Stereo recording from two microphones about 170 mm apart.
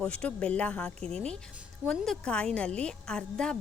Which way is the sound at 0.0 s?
5° left (ahead or behind).